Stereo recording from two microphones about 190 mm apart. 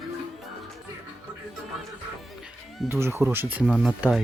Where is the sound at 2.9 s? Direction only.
15° right (ahead or behind).